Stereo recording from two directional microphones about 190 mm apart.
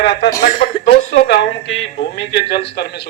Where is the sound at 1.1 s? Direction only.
70° left (ahead or behind).